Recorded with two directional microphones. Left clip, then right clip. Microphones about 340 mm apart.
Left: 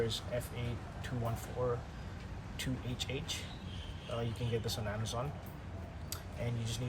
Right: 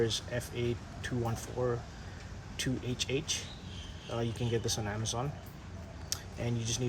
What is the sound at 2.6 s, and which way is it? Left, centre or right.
Speech, right.